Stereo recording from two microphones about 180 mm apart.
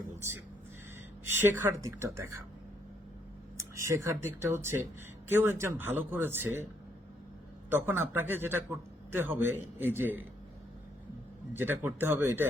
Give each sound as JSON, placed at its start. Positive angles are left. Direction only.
{"t": 1.5, "sound": "speech", "side_deg": -15}
{"t": 3.6, "sound": "speech", "side_deg": -15}
{"t": 7.7, "sound": "speech", "side_deg": -10}
{"t": 11.5, "sound": "speech", "side_deg": -10}